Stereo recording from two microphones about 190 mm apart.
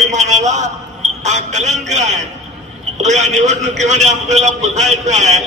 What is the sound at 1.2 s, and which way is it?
A man's voice, 40° right (ahead or behind).